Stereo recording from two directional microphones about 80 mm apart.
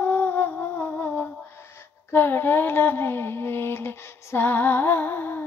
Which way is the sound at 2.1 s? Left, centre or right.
Left.